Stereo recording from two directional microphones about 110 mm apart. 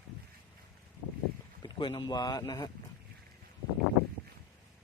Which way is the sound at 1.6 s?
45° left (ahead or behind).